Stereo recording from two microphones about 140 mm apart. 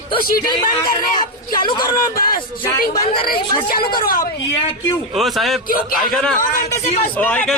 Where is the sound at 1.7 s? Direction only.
85° left.